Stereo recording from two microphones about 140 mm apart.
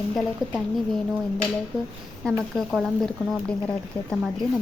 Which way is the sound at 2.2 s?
5° left (ahead or behind).